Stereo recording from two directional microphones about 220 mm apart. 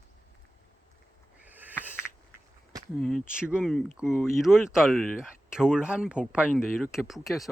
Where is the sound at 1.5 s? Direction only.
10° right (ahead or behind).